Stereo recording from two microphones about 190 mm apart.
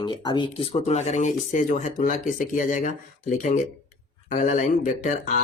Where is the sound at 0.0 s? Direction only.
25° left (ahead or behind).